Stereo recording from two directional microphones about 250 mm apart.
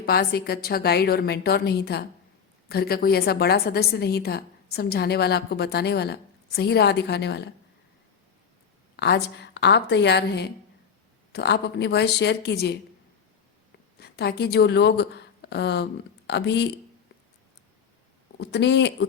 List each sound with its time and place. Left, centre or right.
0.0 s a woman's voice: left
9.0 s a woman's voice: left
14.0 s a woman's voice: left
18.3 s a woman's voice: left